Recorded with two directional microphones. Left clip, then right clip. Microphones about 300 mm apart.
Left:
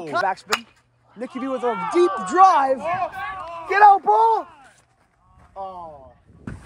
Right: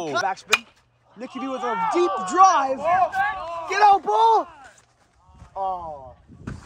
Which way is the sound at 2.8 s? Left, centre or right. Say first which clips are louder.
Right 5 dB; right.